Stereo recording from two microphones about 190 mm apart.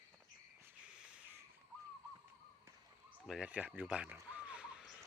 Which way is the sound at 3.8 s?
5° right (ahead or behind).